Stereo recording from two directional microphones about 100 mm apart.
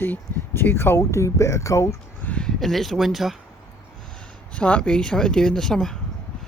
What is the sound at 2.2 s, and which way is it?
Speech, 15° left (ahead or behind).